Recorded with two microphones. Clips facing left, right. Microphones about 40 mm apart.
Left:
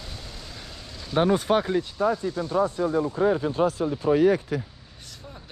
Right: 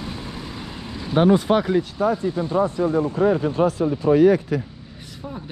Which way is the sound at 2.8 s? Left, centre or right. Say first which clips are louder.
Right 4 dB; right.